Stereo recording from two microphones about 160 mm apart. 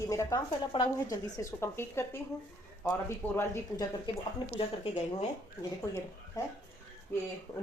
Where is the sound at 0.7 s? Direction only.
35° left (ahead or behind).